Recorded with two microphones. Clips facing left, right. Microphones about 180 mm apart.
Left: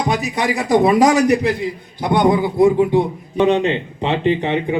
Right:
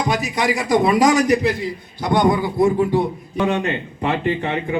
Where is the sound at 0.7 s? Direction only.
20° left (ahead or behind).